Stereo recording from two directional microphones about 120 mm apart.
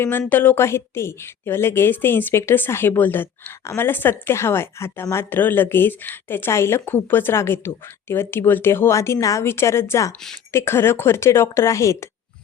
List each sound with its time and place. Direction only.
0.0 s a woman's voice: 15° left (ahead or behind)